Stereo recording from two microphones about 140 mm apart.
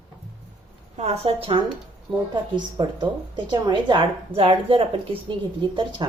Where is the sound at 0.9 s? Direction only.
50° right (ahead or behind); by 6.1 s 35° right (ahead or behind).